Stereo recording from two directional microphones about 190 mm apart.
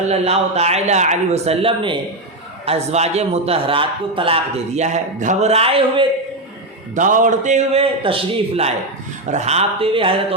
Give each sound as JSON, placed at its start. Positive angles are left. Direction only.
{"t": 0.1, "sound": "a man's voice", "side_deg": -35}
{"t": 6.9, "sound": "a man's voice", "side_deg": -45}